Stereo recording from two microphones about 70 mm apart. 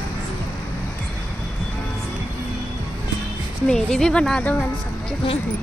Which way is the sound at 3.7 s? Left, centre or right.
Centre.